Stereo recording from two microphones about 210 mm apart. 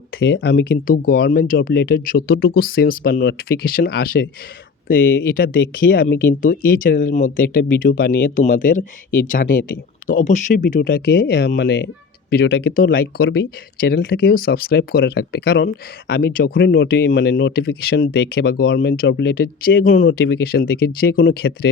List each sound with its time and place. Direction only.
0.2 s speech: 55° left (ahead or behind)
4.9 s speech: 65° left (ahead or behind)
5.3 s speech: 45° left (ahead or behind)
13.0 s speech: 65° left (ahead or behind)
13.7 s speech: 50° left (ahead or behind)
18.6 s speech: 60° left (ahead or behind)